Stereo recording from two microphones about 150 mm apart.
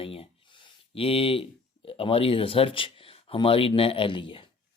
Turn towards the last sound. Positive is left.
turn(degrees=35)  # may be behind; listen again after turning